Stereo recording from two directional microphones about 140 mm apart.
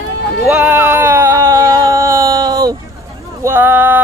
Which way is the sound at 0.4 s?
10° right (ahead or behind).